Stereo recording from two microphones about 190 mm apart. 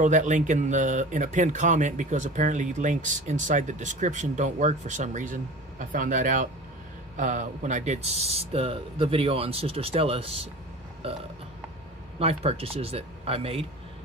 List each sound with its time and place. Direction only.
0.0 s speech: 40° right (ahead or behind)
12.2 s speech: 30° right (ahead or behind)